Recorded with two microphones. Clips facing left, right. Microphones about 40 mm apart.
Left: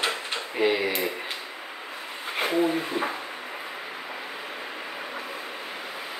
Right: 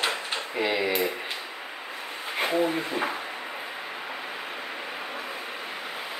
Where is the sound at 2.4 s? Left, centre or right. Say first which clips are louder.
Left 1 dB; centre.